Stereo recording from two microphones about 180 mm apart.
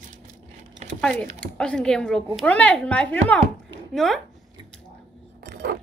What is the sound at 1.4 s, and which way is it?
A woman's voice, 5° left (ahead or behind).